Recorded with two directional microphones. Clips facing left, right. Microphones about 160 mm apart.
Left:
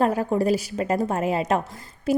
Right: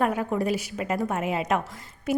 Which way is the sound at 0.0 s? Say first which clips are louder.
Left 4 dB; 35° left (ahead or behind).